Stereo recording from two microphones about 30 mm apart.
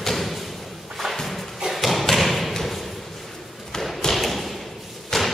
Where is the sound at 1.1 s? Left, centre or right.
Centre.